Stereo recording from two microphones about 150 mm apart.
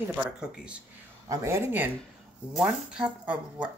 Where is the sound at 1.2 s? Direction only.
20° right (ahead or behind).